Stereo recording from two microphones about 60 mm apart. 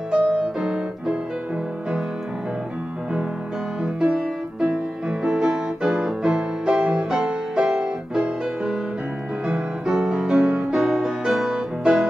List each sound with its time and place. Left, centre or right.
0.1 s music: centre
3.8 s music: centre
9.8 s music: centre